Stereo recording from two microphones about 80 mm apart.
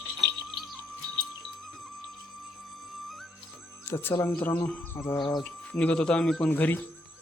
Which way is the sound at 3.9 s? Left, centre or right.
Left.